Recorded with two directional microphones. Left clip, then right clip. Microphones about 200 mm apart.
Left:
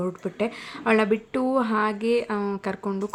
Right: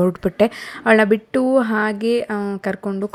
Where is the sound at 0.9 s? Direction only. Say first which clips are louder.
Right 7 dB; 30° right (ahead or behind).